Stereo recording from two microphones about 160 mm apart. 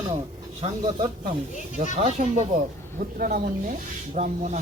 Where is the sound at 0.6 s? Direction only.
40° right (ahead or behind).